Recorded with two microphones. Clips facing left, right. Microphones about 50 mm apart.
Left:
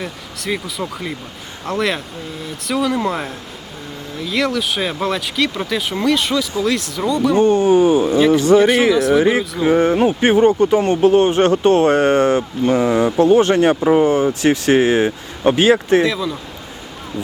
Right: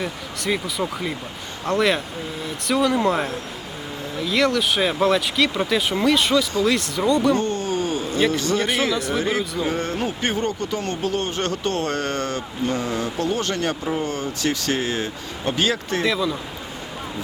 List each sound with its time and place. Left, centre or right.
0.0 s speech: centre
7.3 s speech: left
8.9 s speech: centre
9.6 s speech: left
16.0 s speech: centre